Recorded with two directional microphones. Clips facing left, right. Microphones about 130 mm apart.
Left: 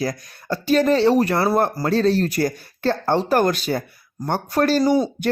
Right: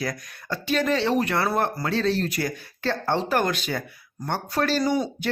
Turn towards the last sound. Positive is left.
turn(degrees=40)  # may be behind; listen again after turning